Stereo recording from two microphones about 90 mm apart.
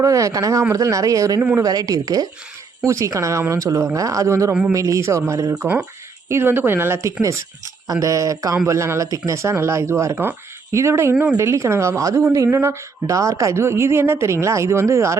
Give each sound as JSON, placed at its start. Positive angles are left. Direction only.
{"t": 0.0, "sound": "a woman's voice", "side_deg": -35}
{"t": 11.1, "sound": "a woman's voice", "side_deg": -15}
{"t": 11.3, "sound": "a woman's voice", "side_deg": -30}